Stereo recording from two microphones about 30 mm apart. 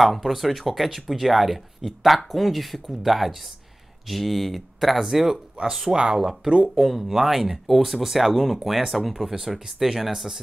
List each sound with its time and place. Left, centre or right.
0.0 s speech: centre
5.3 s speech: centre
6.8 s speech: centre